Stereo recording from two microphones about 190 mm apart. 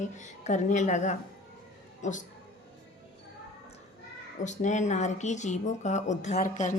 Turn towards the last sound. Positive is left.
turn(degrees=40)  # may be behind; listen again after turning